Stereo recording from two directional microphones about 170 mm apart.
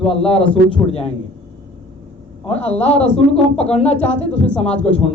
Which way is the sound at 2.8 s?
40° left (ahead or behind).